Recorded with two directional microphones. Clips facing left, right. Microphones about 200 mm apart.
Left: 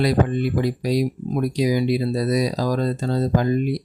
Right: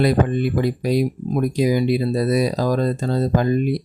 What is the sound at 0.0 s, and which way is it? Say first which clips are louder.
Speech: right 2 dB; 55° right (ahead or behind).